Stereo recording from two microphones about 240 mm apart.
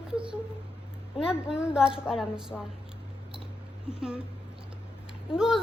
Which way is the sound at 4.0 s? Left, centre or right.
Centre.